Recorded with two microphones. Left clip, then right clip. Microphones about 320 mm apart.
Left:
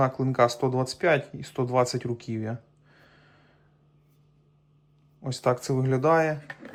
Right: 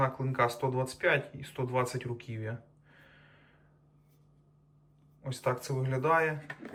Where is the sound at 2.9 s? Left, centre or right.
Centre.